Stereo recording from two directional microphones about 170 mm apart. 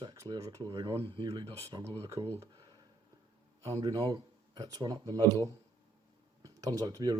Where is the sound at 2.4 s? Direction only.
20° right (ahead or behind).